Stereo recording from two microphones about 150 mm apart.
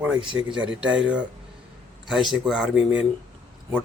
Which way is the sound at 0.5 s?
10° right (ahead or behind).